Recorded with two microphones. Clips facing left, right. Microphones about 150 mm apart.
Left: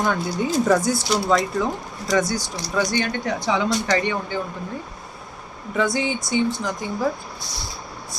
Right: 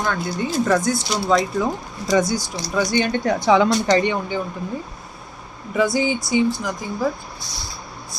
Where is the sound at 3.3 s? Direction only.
55° right (ahead or behind).